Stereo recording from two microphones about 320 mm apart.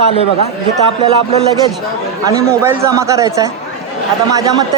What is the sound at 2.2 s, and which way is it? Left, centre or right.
A man's voice, centre.